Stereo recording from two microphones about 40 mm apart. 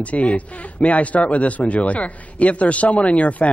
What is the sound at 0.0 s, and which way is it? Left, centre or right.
Speech, left.